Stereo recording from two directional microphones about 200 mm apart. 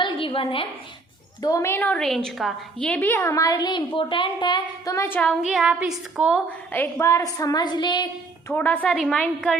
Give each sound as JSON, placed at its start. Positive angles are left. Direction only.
{"t": 0.0, "sound": "a sound", "side_deg": 25}
{"t": 1.4, "sound": "a woman's voice", "side_deg": 15}
{"t": 6.7, "sound": "a woman's voice", "side_deg": 10}
{"t": 8.4, "sound": "a woman's voice", "side_deg": 10}